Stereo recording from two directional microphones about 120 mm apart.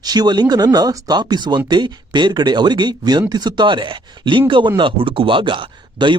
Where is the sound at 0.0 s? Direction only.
35° right (ahead or behind).